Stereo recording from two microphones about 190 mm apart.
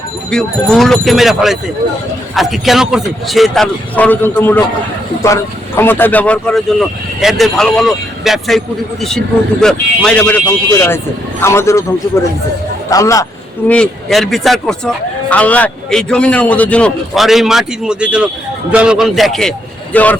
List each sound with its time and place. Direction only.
0.3 s speech: centre (ahead or behind)
11.4 s speech: 15° left (ahead or behind)
13.7 s speech: 5° left (ahead or behind)